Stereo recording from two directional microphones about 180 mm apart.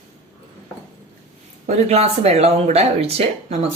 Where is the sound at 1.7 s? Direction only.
35° right (ahead or behind).